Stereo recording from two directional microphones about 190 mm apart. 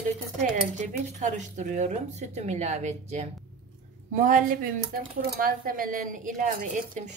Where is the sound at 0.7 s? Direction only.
40° right (ahead or behind).